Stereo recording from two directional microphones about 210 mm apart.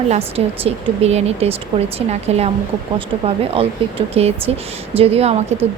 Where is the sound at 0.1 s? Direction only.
30° right (ahead or behind).